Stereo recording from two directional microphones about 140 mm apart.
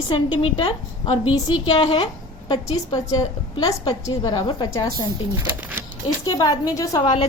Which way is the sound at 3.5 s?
25° left (ahead or behind).